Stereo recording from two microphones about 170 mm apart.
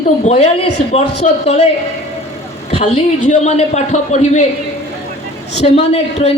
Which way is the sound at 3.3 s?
40° left (ahead or behind).